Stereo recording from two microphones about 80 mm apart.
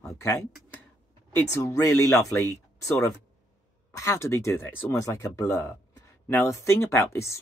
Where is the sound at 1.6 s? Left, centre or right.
Left.